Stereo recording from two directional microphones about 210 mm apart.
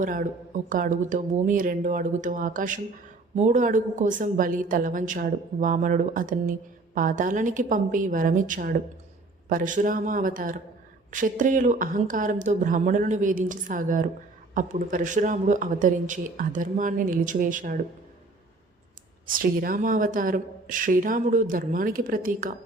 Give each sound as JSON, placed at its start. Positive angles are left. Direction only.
{"t": 0.0, "sound": "a woman's voice", "side_deg": -40}
{"t": 19.2, "sound": "a woman's voice", "side_deg": -40}